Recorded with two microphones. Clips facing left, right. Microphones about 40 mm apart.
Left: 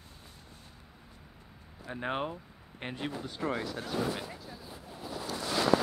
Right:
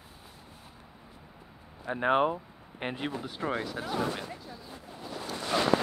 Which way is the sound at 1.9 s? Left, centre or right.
Centre.